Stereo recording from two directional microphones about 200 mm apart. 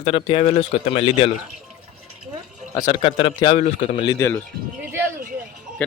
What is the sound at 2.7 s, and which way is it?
Speech, 20° left (ahead or behind).